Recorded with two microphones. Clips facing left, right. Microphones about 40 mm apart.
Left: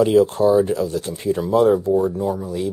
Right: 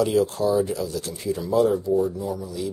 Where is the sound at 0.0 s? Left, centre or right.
Left.